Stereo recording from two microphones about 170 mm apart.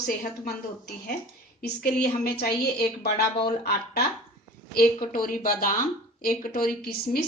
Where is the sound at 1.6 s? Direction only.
65° left (ahead or behind).